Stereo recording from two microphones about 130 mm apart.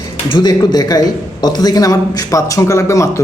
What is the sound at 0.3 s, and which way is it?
A man's voice, 35° left (ahead or behind).